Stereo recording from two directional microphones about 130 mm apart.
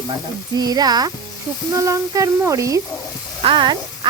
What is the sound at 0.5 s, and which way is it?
Speech, 30° right (ahead or behind).